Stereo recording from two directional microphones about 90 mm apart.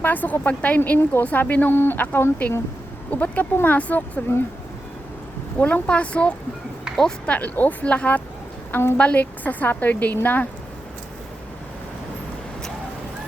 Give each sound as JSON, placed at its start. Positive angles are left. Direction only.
{"t": 0.0, "sound": "a woman's voice", "side_deg": 20}
{"t": 5.5, "sound": "a woman's voice", "side_deg": 15}
{"t": 7.3, "sound": "a woman's voice", "side_deg": 20}
{"t": 8.7, "sound": "a woman's voice", "side_deg": 25}
{"t": 9.0, "sound": "a woman's voice", "side_deg": 15}